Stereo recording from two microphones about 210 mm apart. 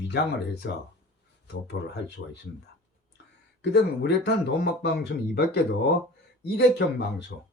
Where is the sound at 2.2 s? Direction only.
55° left (ahead or behind).